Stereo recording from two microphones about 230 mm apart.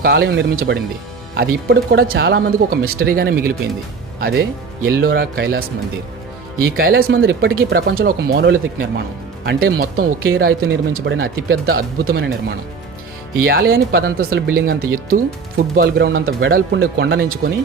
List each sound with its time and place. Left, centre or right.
0.0 s speech: right
6.7 s speech: right